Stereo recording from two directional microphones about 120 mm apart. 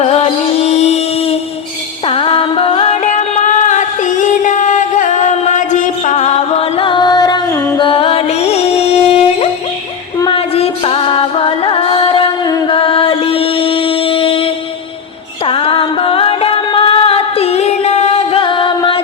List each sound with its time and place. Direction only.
0.0 s music: 55° left (ahead or behind)
2.0 s music: 45° left (ahead or behind)
7.8 s music: 50° left (ahead or behind)